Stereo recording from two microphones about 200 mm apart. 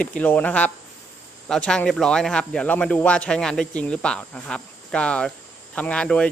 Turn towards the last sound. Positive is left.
turn(degrees=5)  # may be behind; listen again after turning